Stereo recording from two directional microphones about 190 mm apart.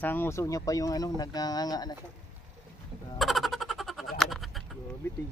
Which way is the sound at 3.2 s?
Centre (ahead or behind).